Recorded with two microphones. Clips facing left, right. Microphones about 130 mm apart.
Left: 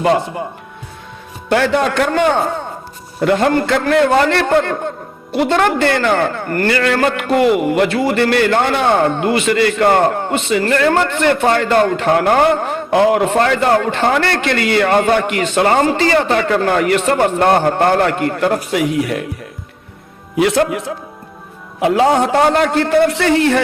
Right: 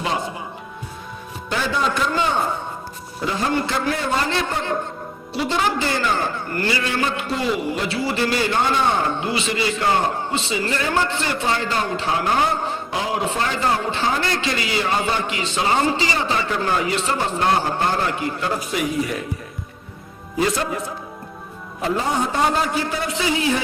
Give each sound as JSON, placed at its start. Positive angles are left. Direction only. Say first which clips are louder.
{"t": 0.0, "sound": "a man's voice", "louder": "left 10 dB", "side_deg": 55}
{"t": 1.5, "sound": "a man's voice", "louder": "left 8 dB", "side_deg": 65}
{"t": 20.3, "sound": "a man's voice", "louder": "left 8 dB", "side_deg": 75}